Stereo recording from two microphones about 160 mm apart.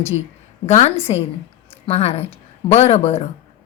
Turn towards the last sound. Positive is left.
turn(degrees=40)  # may be behind; listen again after turning